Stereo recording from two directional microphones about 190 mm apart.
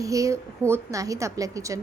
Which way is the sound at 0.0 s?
15° right (ahead or behind).